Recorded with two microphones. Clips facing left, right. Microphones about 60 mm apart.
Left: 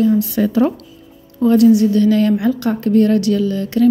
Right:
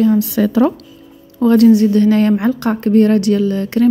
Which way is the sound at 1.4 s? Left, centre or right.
Right.